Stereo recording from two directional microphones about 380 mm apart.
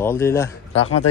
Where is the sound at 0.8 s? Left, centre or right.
Left.